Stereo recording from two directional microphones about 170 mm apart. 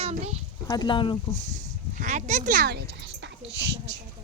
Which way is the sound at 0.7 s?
25° left (ahead or behind).